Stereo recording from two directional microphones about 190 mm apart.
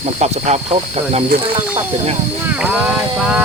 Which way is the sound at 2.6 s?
5° right (ahead or behind).